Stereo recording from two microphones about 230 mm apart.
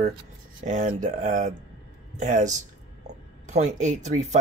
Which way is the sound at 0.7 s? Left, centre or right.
Right.